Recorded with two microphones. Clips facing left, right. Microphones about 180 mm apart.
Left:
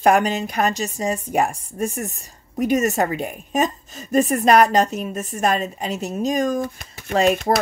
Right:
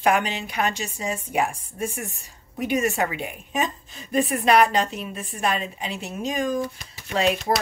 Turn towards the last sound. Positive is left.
turn(degrees=50)  # may be behind; listen again after turning